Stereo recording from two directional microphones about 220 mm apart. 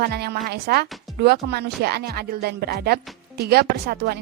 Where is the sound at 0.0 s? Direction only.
45° right (ahead or behind).